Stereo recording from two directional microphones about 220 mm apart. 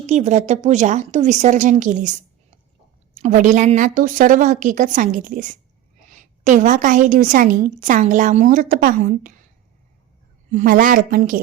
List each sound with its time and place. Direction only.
0.0 s a woman's voice: 30° right (ahead or behind)
3.2 s a woman's voice: 35° right (ahead or behind)
10.5 s a woman's voice: 35° right (ahead or behind)